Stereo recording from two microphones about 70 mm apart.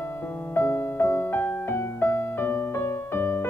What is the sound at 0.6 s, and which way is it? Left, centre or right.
Music, left.